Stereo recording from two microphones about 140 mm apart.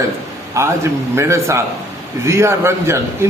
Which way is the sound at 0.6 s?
20° right (ahead or behind).